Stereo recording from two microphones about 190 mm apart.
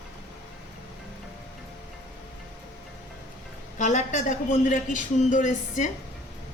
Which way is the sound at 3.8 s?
40° left (ahead or behind).